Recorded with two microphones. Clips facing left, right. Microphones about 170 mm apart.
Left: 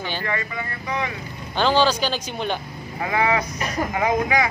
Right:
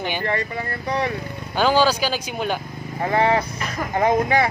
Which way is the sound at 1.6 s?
10° right (ahead or behind).